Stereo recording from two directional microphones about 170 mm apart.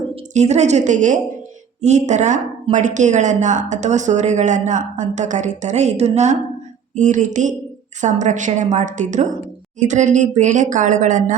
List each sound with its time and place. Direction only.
0.3 s speech: 40° right (ahead or behind)